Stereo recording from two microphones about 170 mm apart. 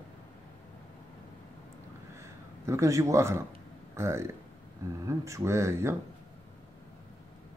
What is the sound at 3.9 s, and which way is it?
A man's voice, 15° right (ahead or behind).